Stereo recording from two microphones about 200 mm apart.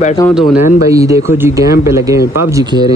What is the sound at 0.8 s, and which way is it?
Speech, 15° right (ahead or behind).